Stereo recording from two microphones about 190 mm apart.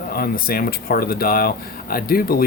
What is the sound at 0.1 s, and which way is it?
Speech, 50° left (ahead or behind).